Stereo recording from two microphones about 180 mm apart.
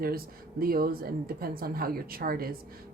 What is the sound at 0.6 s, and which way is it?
A woman's voice, 55° right (ahead or behind).